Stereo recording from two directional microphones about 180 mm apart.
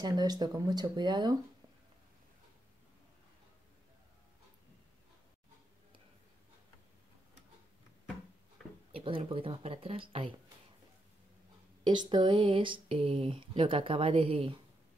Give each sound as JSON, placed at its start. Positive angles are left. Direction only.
{"t": 0.0, "sound": "speech", "side_deg": -20}
{"t": 8.9, "sound": "speech", "side_deg": -30}
{"t": 11.8, "sound": "speech", "side_deg": -25}